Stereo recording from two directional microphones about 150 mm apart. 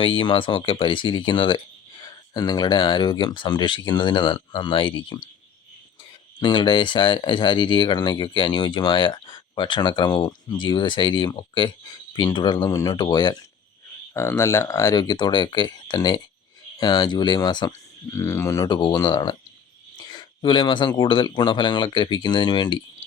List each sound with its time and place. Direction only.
0.0 s speech: 35° left (ahead or behind)
6.4 s speech: 30° left (ahead or behind)
14.1 s speech: 15° left (ahead or behind)